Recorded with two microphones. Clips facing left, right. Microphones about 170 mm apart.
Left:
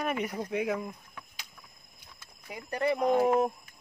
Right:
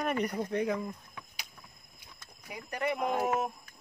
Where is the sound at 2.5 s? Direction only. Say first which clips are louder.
Left 4 dB; 30° left (ahead or behind).